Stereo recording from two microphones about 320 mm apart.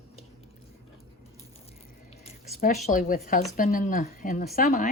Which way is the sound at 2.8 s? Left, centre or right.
Left.